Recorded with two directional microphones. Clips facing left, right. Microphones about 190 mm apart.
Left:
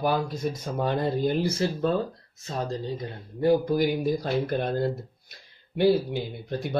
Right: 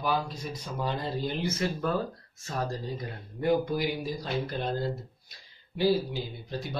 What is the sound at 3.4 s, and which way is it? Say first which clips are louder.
Speech: left 5 dB; 35° left (ahead or behind).